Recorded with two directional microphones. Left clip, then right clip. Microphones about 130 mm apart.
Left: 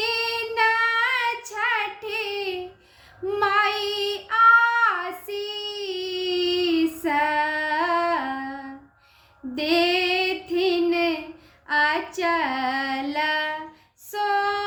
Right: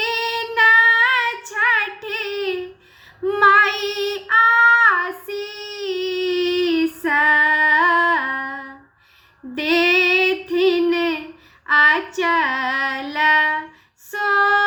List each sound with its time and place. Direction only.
0.0 s child singing: 45° left (ahead or behind)
9.6 s female singing: 40° left (ahead or behind)